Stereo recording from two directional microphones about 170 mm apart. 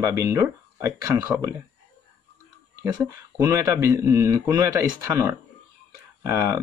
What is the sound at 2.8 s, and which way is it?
Speech, 20° right (ahead or behind).